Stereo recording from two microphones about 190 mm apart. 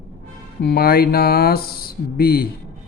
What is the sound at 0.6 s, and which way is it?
Mantra, 55° left (ahead or behind).